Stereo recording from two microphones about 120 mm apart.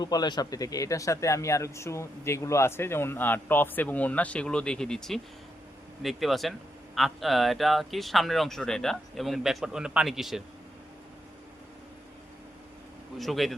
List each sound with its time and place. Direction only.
0.0 s speech: 35° left (ahead or behind); by 10.4 s 5° right (ahead or behind)
13.1 s speech: centre (ahead or behind)